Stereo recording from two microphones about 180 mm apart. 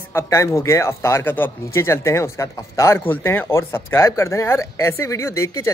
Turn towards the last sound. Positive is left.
turn(degrees=15)  # may be behind; listen again after turning